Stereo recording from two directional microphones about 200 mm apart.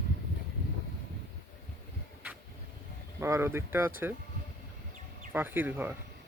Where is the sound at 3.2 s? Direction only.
15° right (ahead or behind).